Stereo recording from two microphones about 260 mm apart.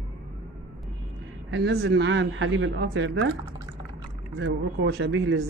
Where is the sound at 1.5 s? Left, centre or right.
Right.